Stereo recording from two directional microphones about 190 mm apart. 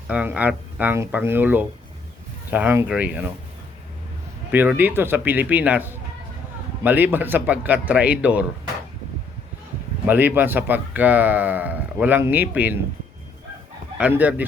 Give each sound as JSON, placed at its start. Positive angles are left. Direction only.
{"t": 0.1, "sound": "speech", "side_deg": -5}
{"t": 4.5, "sound": "speech", "side_deg": -10}
{"t": 10.1, "sound": "speech", "side_deg": -10}
{"t": 14.0, "sound": "speech", "side_deg": -10}